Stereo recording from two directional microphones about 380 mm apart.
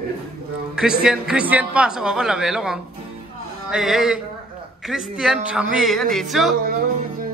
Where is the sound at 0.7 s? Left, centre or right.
Centre.